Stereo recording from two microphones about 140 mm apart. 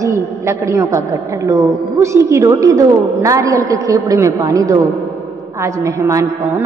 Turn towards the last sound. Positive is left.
turn(degrees=-20)  # may be behind; listen again after turning